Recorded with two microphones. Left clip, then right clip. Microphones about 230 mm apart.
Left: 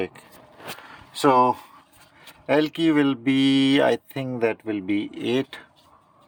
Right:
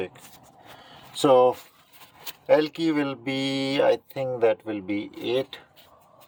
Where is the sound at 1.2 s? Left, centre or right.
Left.